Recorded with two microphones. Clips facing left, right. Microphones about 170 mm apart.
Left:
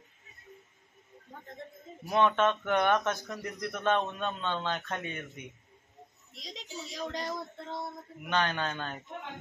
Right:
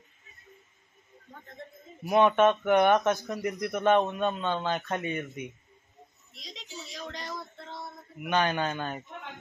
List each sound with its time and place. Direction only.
2.0 s a man's voice: 15° right (ahead or behind)
6.5 s speech: 45° left (ahead or behind)
8.3 s a man's voice: 10° right (ahead or behind)